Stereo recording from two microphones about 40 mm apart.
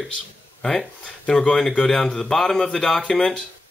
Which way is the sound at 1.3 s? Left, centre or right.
Centre.